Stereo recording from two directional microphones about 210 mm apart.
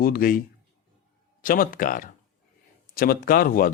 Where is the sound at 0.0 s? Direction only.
45° left (ahead or behind).